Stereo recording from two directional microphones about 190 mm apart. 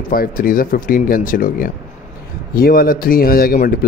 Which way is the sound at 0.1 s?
50° left (ahead or behind).